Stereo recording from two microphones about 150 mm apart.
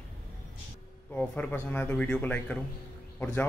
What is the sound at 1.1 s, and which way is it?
Speech, 10° left (ahead or behind).